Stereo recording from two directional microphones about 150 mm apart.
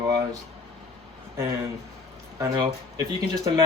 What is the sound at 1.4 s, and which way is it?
Speech, 20° right (ahead or behind).